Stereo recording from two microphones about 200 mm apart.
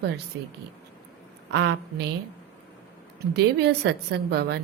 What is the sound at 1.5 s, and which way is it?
Speech, 55° right (ahead or behind).